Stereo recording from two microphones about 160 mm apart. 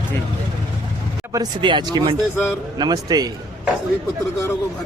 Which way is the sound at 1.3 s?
30° right (ahead or behind).